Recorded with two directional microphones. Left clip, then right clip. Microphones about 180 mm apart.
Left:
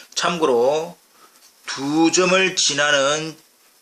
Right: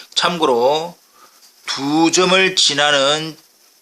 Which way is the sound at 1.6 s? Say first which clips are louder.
Right 3 dB; 35° right (ahead or behind).